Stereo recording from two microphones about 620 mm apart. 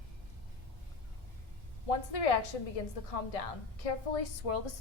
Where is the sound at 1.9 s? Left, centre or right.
Left.